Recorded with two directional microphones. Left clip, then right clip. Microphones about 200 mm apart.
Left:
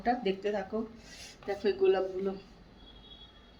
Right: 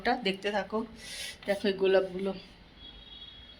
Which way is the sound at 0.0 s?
10° right (ahead or behind).